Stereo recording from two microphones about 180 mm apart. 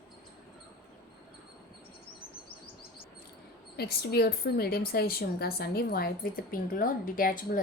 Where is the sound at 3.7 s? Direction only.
60° left (ahead or behind).